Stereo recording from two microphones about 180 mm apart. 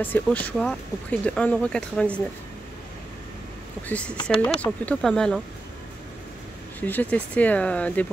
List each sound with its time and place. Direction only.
0.0 s speech: 10° left (ahead or behind)
3.8 s speech: 5° left (ahead or behind)
4.2 s speech: 25° left (ahead or behind)
4.6 s speech: 5° left (ahead or behind)
6.8 s speech: 10° left (ahead or behind)